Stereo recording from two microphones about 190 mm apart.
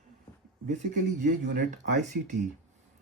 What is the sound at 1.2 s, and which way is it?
Speech, 40° right (ahead or behind).